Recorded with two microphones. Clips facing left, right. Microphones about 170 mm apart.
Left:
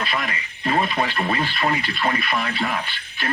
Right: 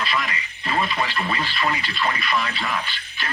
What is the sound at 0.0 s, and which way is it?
Speech, 50° left (ahead or behind).